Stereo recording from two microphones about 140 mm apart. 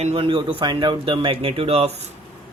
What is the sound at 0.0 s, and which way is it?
Speech, 45° right (ahead or behind).